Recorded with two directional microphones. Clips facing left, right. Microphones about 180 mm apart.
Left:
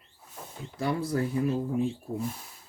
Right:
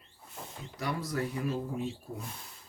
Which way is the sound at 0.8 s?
30° left (ahead or behind).